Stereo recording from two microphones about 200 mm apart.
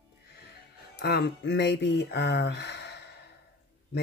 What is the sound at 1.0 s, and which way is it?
Speech, 55° left (ahead or behind).